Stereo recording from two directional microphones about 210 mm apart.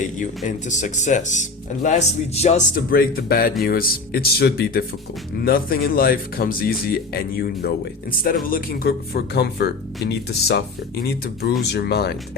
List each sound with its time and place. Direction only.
0.0 s speech: 35° left (ahead or behind)
11.7 s speech: 50° left (ahead or behind)